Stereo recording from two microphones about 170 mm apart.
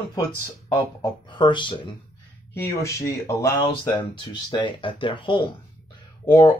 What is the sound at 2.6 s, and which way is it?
Speech, 15° left (ahead or behind).